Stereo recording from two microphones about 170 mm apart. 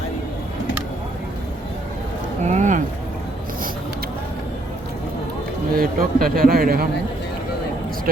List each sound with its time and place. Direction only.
2.4 s speech: 45° right (ahead or behind)
5.7 s a man's voice: 60° right (ahead or behind)